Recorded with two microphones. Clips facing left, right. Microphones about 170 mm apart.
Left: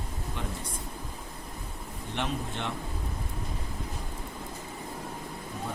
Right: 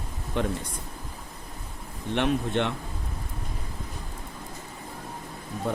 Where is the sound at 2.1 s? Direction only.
65° right (ahead or behind).